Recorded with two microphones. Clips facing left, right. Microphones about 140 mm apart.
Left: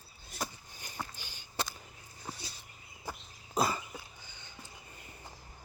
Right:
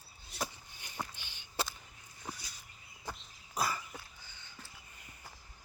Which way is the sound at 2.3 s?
30° left (ahead or behind).